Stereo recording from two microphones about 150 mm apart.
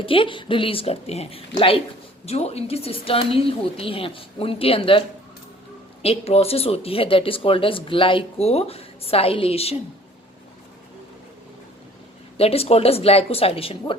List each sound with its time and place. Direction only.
0.0 s speech: 35° left (ahead or behind)
12.4 s speech: 40° left (ahead or behind)